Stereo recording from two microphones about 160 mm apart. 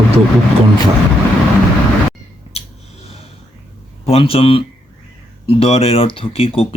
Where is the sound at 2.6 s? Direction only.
40° left (ahead or behind).